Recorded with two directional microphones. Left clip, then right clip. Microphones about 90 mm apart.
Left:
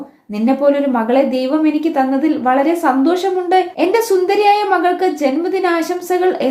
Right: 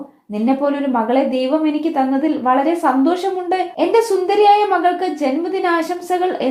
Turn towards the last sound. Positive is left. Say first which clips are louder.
# left 3 dB
turn(degrees=-30)  # may be behind; listen again after turning